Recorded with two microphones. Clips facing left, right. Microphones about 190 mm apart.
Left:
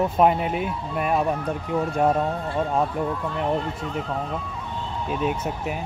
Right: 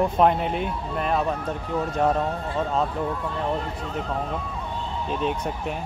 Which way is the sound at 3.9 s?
Centre (ahead or behind).